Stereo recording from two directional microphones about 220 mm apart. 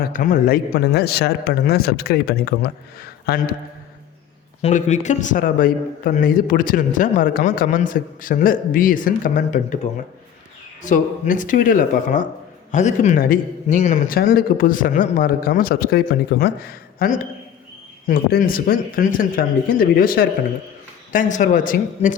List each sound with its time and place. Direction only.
0.0 s speech: 40° left (ahead or behind)
4.6 s a man's voice: 30° left (ahead or behind)
10.8 s a man's voice: 35° left (ahead or behind)